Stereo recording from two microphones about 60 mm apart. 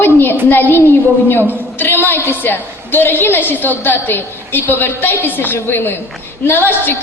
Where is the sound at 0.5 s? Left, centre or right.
Left.